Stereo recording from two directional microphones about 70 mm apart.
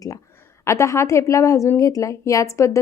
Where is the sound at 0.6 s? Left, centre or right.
Left.